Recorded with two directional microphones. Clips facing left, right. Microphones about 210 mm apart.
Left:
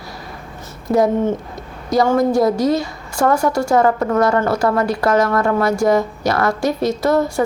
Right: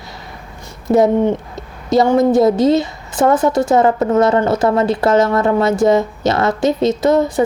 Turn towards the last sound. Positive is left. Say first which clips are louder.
# right 3 dB
turn(degrees=-20)  # may be behind; listen again after turning